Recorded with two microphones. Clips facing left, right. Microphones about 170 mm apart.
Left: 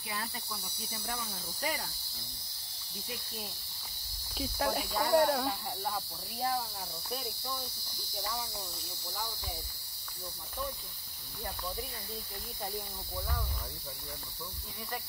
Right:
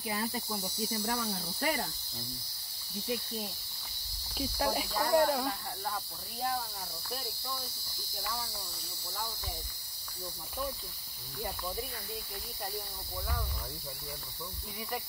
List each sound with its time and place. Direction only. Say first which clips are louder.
0.6 s cricket: right 10 dB; 65° right (ahead or behind)
4.4 s speech: right 1 dB; centre (ahead or behind)
11.4 s cricket: right 2 dB; 15° right (ahead or behind)